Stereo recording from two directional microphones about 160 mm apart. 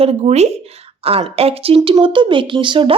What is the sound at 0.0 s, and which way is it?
A woman's voice, 40° right (ahead or behind).